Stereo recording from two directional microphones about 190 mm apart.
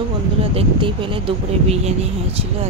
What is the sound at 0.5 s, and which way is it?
Speech, 25° right (ahead or behind).